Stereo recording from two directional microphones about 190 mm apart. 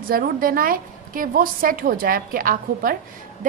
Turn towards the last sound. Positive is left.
turn(degrees=-45)  # may be behind; listen again after turning